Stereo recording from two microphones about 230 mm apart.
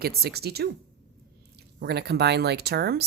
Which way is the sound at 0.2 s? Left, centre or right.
Right.